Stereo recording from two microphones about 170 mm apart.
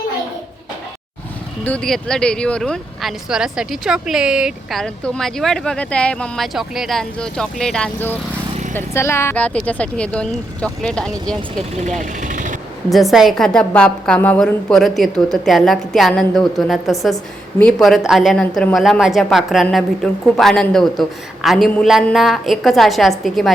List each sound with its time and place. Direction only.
1.6 s speech: 5° left (ahead or behind)
11.7 s speech: 45° right (ahead or behind)
12.2 s vehicle: 50° right (ahead or behind)
12.9 s speech: centre (ahead or behind)